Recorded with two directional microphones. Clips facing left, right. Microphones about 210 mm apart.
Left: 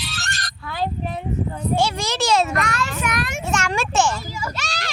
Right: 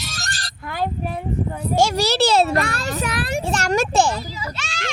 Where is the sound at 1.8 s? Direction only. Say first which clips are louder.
Right 7 dB; 40° right (ahead or behind).